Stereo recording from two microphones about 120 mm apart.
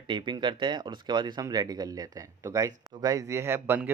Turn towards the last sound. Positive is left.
turn(degrees=-20)  # may be behind; listen again after turning